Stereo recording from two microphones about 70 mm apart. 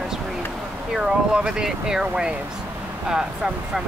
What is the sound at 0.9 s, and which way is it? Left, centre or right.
Speech, centre.